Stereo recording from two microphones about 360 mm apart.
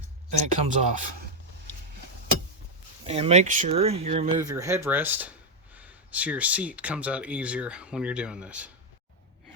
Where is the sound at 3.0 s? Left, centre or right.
Centre.